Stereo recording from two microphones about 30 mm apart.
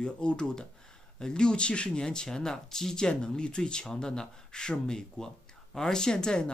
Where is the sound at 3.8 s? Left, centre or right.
Centre.